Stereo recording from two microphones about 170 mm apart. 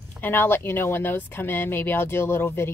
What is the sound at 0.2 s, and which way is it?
A woman's voice, 15° left (ahead or behind).